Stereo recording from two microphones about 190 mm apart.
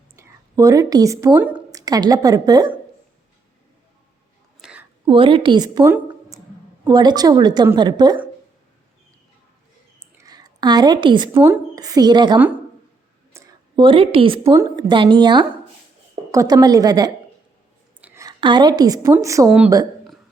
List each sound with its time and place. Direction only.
0.2 s speech: 15° right (ahead or behind)
1.8 s a woman's voice: 20° right (ahead or behind)
4.6 s a sound: 5° right (ahead or behind)
5.0 s a woman's voice: 25° right (ahead or behind)
10.2 s a woman's voice: 20° right (ahead or behind)